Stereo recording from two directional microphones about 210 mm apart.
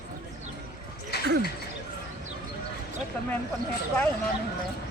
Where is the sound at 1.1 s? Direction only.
50° left (ahead or behind).